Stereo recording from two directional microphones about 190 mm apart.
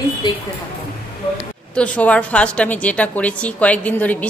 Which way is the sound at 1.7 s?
5° left (ahead or behind).